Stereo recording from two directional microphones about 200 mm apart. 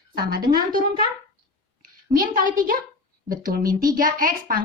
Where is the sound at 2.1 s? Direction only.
45° right (ahead or behind).